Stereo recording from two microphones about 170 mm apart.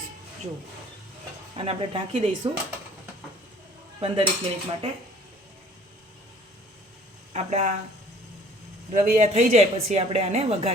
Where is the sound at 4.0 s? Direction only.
35° right (ahead or behind).